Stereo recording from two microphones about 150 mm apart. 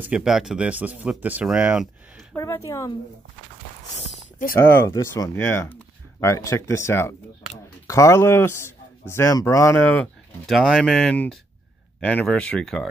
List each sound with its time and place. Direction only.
0.0 s speech: 5° right (ahead or behind)
2.3 s speech: 20° left (ahead or behind)
4.6 s speech: 15° left (ahead or behind)
10.5 s speech: centre (ahead or behind)